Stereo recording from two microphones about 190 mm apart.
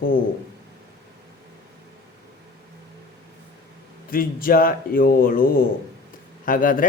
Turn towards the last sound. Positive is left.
turn(degrees=45)  # may be behind; listen again after turning